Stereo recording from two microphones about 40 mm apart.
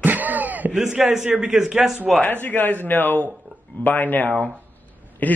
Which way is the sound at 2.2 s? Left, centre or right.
Left.